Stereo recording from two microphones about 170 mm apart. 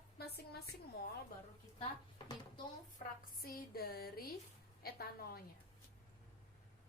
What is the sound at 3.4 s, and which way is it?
A woman's voice, 65° left (ahead or behind).